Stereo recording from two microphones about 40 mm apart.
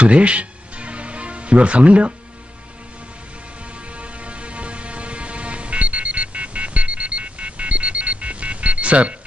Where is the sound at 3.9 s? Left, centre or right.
Right.